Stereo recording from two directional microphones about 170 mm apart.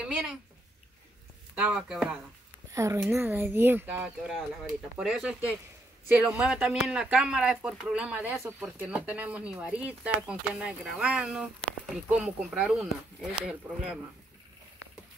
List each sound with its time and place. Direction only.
0.0 s speech: 5° right (ahead or behind)
1.5 s speech: 5° right (ahead or behind)
2.7 s speech: 20° right (ahead or behind)